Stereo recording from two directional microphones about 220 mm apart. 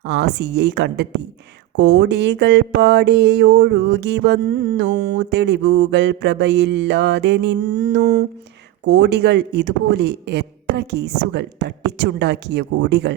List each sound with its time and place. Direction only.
0.0 s speech: 50° right (ahead or behind)